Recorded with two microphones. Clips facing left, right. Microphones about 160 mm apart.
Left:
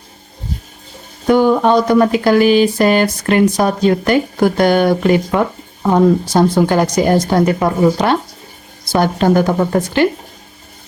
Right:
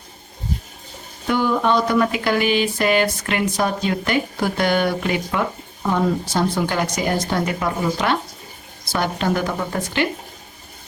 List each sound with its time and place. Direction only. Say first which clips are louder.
1.3 s a woman's voice: left 8 dB; 45° left (ahead or behind)